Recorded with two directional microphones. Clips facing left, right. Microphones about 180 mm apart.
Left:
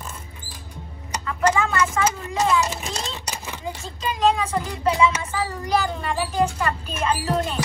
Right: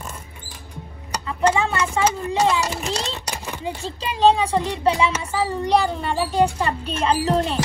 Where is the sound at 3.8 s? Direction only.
30° right (ahead or behind).